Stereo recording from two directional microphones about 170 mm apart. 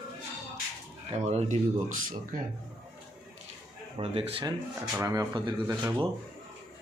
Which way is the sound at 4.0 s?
35° right (ahead or behind).